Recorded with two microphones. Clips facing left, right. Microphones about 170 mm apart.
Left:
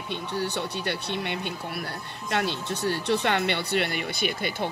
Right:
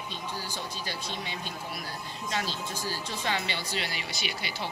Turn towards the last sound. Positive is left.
turn(degrees=50)  # may be behind; listen again after turning